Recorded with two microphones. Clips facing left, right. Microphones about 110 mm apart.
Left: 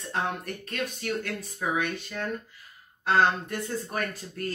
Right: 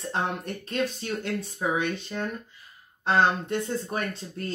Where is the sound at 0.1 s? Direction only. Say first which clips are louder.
Right 1 dB; 25° right (ahead or behind).